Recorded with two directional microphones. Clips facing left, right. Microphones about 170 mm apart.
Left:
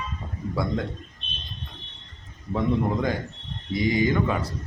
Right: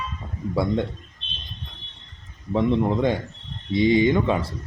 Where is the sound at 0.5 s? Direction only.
30° right (ahead or behind).